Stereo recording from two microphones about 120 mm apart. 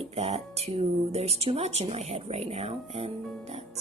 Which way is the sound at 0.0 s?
60° right (ahead or behind).